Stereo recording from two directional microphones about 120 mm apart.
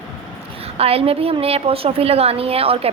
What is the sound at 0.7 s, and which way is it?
A woman's voice, 55° right (ahead or behind).